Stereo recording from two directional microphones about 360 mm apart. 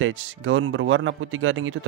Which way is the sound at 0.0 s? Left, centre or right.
Right.